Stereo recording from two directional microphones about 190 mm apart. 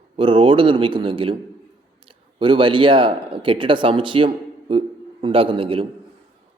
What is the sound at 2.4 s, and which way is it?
A man's voice, 25° right (ahead or behind).